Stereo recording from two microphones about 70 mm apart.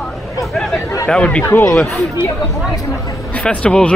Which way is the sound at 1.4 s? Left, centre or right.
Left.